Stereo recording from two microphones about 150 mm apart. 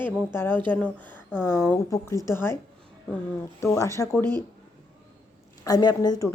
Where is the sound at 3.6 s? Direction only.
20° left (ahead or behind).